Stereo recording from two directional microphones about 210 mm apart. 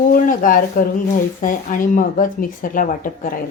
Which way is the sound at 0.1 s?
40° left (ahead or behind).